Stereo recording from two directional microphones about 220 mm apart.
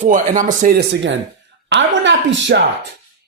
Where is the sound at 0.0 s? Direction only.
35° right (ahead or behind).